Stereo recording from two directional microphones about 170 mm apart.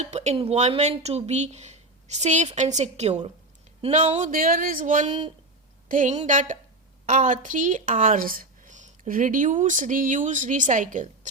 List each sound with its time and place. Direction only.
0.0 s speech: 40° right (ahead or behind)
4.3 s speech: 55° right (ahead or behind)